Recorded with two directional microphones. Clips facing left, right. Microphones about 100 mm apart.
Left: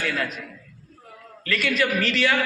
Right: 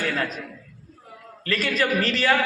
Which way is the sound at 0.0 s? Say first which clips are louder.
Right 1 dB; 35° right (ahead or behind).